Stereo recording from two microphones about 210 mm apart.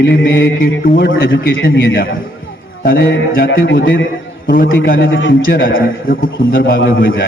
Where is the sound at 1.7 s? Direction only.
45° left (ahead or behind).